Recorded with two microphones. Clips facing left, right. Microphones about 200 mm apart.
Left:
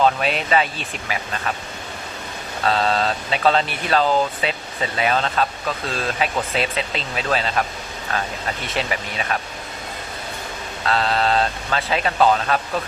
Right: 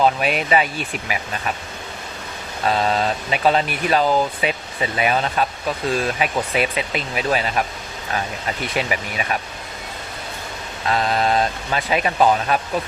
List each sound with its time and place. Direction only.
0.0 s speech: 10° right (ahead or behind)
2.6 s speech: 15° right (ahead or behind)
8.6 s speech: 10° right (ahead or behind)
10.8 s speech: 15° right (ahead or behind)